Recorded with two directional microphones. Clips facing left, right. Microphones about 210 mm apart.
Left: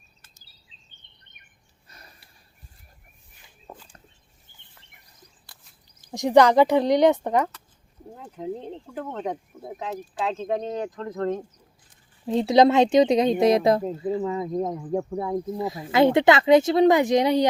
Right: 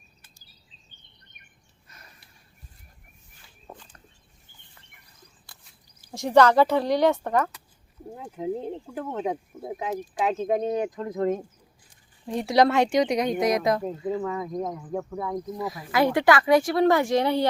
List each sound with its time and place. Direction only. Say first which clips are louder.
1.9 s a sound: left 2 dB; 35° left (ahead or behind)
6.0 s speech: left 2 dB; 15° left (ahead or behind)
8.1 s speech: right 2 dB; 10° right (ahead or behind)
12.2 s speech: left 4 dB; 25° left (ahead or behind)